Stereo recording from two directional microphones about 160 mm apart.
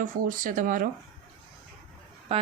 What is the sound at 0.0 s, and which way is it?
Speech, 60° right (ahead or behind).